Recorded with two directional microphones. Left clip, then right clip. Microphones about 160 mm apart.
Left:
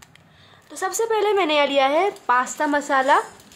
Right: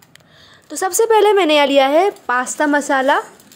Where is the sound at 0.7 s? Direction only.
30° right (ahead or behind).